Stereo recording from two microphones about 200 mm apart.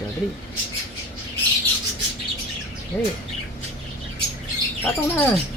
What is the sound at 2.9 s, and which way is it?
Speech, 10° left (ahead or behind).